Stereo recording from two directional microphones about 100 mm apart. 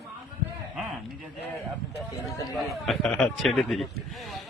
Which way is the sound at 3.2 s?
Centre (ahead or behind).